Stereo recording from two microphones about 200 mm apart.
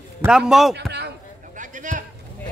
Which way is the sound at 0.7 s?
55° right (ahead or behind).